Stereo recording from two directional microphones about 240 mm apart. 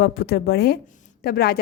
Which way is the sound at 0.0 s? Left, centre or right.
Left.